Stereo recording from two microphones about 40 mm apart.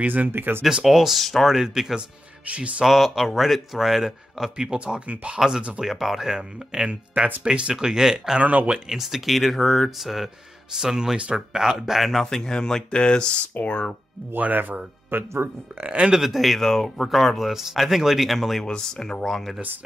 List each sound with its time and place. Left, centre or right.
0.0 s speech: right
0.8 s speech: centre
1.5 s speech: centre
2.4 s speech: right
2.8 s speech: centre
4.7 s speech: right
5.3 s speech: centre
12.3 s speech: centre
14.5 s speech: right
15.0 s speech: right
15.8 s speech: right
16.2 s speech: centre
17.4 s speech: centre
18.6 s speech: centre